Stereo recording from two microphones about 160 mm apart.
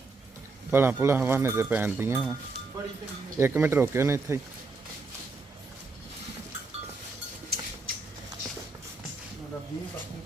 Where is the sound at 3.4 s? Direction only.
15° right (ahead or behind).